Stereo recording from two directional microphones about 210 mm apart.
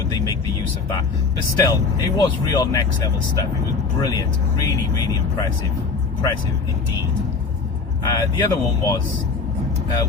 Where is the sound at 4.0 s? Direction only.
15° left (ahead or behind).